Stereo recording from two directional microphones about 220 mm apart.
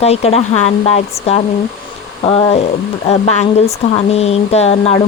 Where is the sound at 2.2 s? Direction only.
25° left (ahead or behind).